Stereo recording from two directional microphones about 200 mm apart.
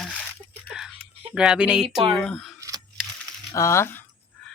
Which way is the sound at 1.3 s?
5° right (ahead or behind).